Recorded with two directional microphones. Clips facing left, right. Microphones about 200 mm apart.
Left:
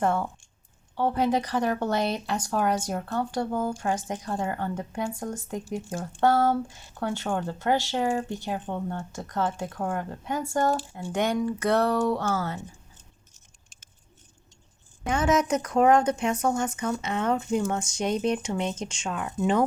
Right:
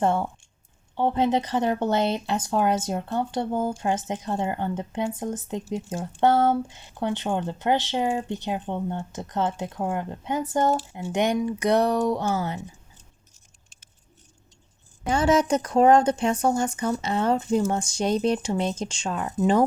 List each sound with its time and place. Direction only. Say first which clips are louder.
0.0 s speech: right 2 dB; 25° right (ahead or behind)
15.0 s speech: right 3 dB; 30° right (ahead or behind)